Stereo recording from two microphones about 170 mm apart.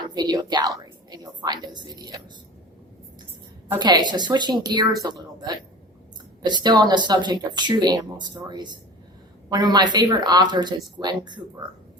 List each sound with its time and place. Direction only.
0.0 s a woman's voice: 25° right (ahead or behind)
3.8 s speech: 25° right (ahead or behind)